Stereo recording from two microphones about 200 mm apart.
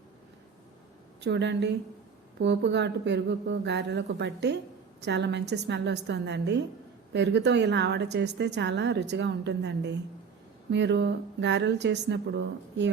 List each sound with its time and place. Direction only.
1.2 s a woman's voice: 60° right (ahead or behind)